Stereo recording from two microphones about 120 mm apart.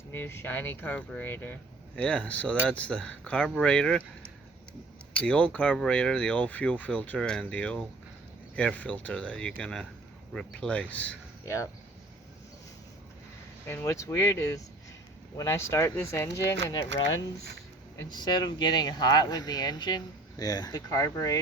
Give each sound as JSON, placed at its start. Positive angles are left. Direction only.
{"t": 0.1, "sound": "speech", "side_deg": 20}
{"t": 5.1, "sound": "speech", "side_deg": 10}
{"t": 11.4, "sound": "speech", "side_deg": 25}
{"t": 13.7, "sound": "speech", "side_deg": 25}